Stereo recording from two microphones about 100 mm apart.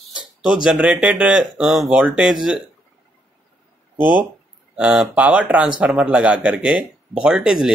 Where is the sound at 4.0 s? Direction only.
15° right (ahead or behind).